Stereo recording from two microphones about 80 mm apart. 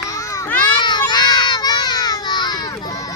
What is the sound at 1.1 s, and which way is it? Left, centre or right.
Children playing, left.